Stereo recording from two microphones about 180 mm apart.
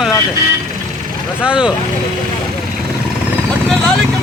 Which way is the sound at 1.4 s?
5° right (ahead or behind).